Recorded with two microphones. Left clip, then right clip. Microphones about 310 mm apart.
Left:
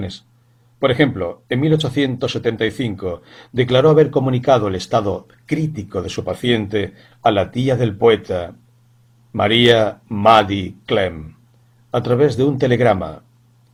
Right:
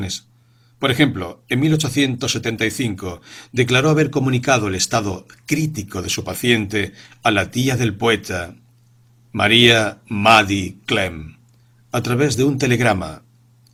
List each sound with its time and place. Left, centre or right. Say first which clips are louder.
0.0 s speech: right 3 dB; right